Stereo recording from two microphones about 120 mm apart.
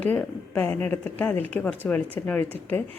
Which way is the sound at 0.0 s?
15° left (ahead or behind).